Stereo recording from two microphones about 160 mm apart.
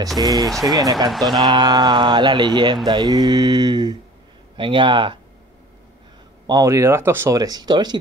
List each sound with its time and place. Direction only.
0.2 s speech: 25° right (ahead or behind)
0.5 s speech: centre (ahead or behind)
1.5 s speech: 25° right (ahead or behind)
6.4 s speech: 20° right (ahead or behind)